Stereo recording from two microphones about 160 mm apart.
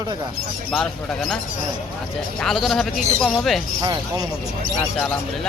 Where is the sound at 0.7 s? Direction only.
Centre (ahead or behind).